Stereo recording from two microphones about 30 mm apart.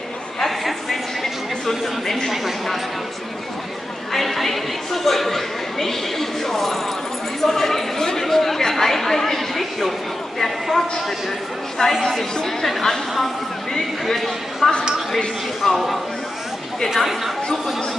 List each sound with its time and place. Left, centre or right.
0.5 s a sound: centre
4.1 s chatter: centre
7.4 s a sound: centre
10.4 s a man's voice: centre
11.8 s speech: left
12.4 s speech: centre